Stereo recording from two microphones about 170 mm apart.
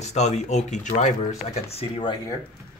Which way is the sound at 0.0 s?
40° left (ahead or behind).